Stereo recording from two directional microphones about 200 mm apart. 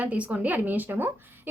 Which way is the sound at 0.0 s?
10° right (ahead or behind).